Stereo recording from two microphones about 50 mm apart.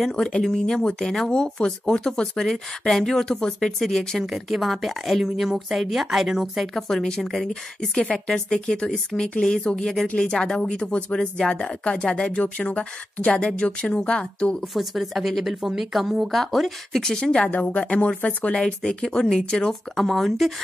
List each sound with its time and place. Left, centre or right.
0.0 s speech: centre
10.9 s speech: left
11.1 s speech: centre
14.7 s speech: centre
17.2 s speech: centre
17.5 s speech: left; by 20.5 s centre